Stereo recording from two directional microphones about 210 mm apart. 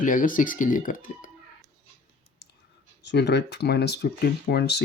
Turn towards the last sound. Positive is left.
turn(degrees=50)  # may be behind; listen again after turning